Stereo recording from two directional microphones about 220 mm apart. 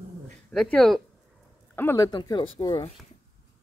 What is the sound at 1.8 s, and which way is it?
Speech, 15° left (ahead or behind).